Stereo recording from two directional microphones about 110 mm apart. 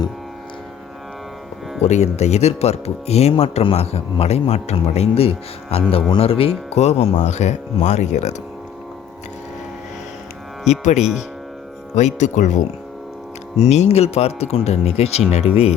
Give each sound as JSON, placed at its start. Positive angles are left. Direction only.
{"t": 1.8, "sound": "speech", "side_deg": 90}
{"t": 10.7, "sound": "speech", "side_deg": 90}
{"t": 13.7, "sound": "speech", "side_deg": 80}